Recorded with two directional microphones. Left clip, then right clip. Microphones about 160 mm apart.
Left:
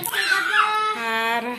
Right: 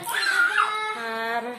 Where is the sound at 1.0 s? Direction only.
Centre (ahead or behind).